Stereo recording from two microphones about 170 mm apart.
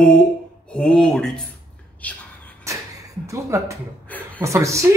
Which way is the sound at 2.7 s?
15° right (ahead or behind).